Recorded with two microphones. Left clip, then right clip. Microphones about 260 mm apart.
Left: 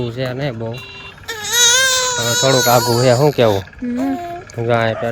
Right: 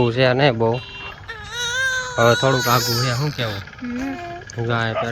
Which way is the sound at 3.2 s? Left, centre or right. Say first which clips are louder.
Left 13 dB; centre.